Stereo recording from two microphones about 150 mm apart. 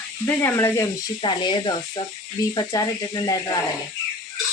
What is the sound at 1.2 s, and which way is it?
Speech, 30° left (ahead or behind).